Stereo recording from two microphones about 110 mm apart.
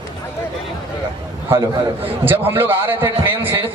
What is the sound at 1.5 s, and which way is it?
A man's voice, 20° right (ahead or behind).